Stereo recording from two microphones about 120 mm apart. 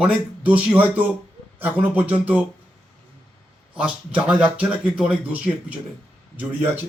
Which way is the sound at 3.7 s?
10° right (ahead or behind).